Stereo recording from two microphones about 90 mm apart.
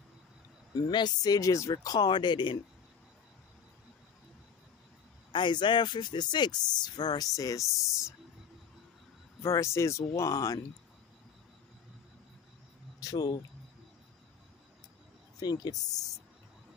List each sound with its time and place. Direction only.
0.8 s speech: 50° left (ahead or behind)
5.3 s speech: 60° left (ahead or behind); by 7.6 s 40° left (ahead or behind)
9.4 s speech: 30° left (ahead or behind)
13.0 s speech: 45° left (ahead or behind)
15.4 s speech: 50° left (ahead or behind)